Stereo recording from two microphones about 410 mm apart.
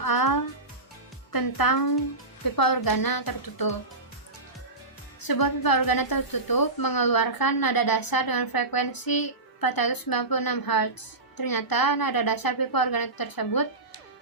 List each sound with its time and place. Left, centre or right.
0.0 s music: left
1.3 s a woman's voice: left
5.2 s a woman's voice: left